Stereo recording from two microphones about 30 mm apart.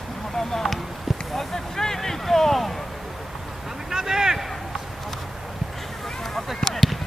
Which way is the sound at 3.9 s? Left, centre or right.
Centre.